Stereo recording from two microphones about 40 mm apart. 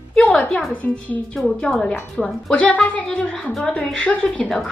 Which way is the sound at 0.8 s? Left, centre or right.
Left.